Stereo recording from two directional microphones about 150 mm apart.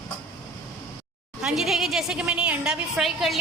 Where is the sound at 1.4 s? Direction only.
5° right (ahead or behind).